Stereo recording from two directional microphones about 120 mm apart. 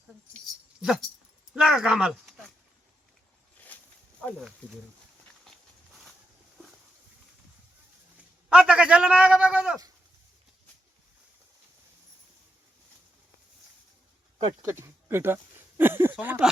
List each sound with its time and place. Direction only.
0.8 s speech: 5° right (ahead or behind)
4.2 s speech: 10° left (ahead or behind)
5.5 s walk: centre (ahead or behind)
8.4 s a man's voice: 10° right (ahead or behind)
14.6 s a man's voice: 20° right (ahead or behind)